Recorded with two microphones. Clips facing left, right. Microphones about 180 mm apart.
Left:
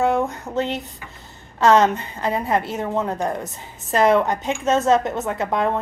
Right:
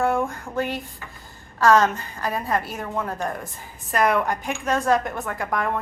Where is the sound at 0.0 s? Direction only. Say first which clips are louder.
Left 3 dB; 20° left (ahead or behind).